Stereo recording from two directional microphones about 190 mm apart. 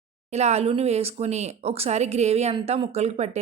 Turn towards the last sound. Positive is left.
turn(degrees=-35)  # may be behind; listen again after turning